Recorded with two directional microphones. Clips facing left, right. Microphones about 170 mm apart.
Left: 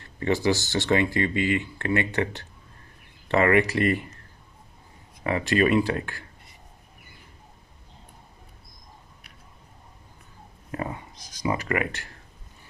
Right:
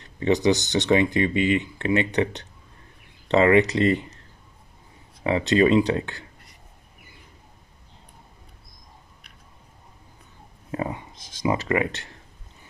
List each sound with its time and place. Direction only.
0.0 s speech: 20° right (ahead or behind)
5.2 s speech: 20° right (ahead or behind)
10.7 s speech: 25° right (ahead or behind)